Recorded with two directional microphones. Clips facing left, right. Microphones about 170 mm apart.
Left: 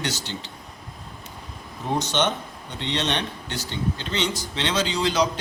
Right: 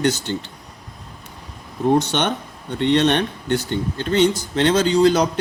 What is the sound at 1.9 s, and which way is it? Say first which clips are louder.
A man's voice: right 4 dB; 60° right (ahead or behind).